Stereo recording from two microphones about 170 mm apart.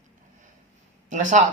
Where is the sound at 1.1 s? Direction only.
45° right (ahead or behind).